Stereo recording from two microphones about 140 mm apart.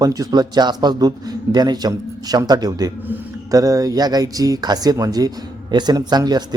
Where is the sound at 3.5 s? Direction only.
25° right (ahead or behind).